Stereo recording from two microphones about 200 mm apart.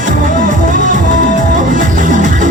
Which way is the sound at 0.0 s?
40° right (ahead or behind).